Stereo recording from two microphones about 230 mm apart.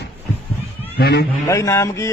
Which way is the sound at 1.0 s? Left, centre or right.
Left.